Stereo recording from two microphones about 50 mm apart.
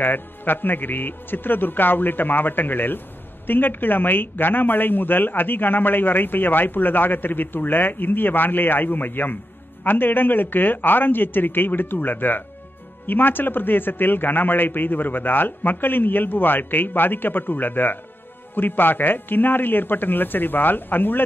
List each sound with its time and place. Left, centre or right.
0.0 s a woman's voice: left